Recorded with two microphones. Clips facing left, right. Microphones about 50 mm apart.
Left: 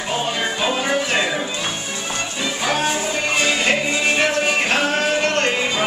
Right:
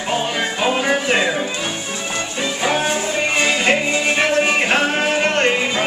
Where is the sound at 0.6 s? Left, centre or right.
Centre.